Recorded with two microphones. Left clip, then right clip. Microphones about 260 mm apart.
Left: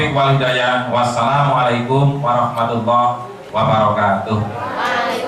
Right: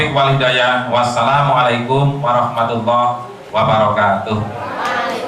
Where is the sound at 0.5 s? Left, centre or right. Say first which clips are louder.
Right 2 dB; centre.